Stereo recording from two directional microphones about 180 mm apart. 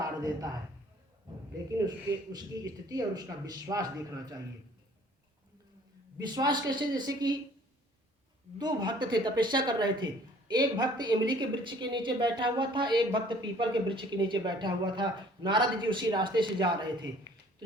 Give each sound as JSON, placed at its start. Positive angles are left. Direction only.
{"t": 0.2, "sound": "a woman's voice", "side_deg": -20}
{"t": 2.9, "sound": "a woman's voice", "side_deg": -20}
{"t": 6.1, "sound": "a woman's voice", "side_deg": -20}
{"t": 8.5, "sound": "a woman's voice", "side_deg": -25}